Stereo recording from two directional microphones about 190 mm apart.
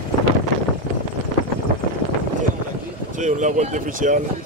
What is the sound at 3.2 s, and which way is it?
Speech, 40° right (ahead or behind).